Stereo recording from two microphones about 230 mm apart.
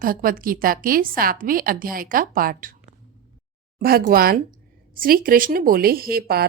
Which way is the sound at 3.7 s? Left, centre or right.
Right.